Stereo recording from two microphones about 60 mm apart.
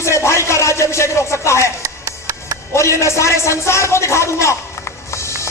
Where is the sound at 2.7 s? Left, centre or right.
Left.